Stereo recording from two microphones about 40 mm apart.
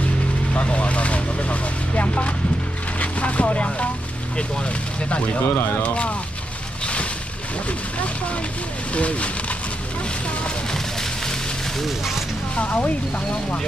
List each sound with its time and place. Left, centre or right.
0.6 s speech: left
5.4 s speech: left
5.8 s speech: left
8.9 s speech: left
10.7 s a sound: centre
11.8 s speech: centre
12.5 s speech: left